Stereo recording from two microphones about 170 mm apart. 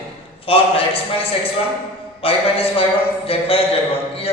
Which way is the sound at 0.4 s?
35° left (ahead or behind).